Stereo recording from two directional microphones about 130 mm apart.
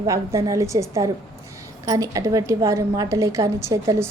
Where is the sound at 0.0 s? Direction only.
25° right (ahead or behind).